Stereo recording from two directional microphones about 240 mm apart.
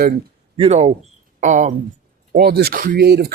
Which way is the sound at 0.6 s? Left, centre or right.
Right.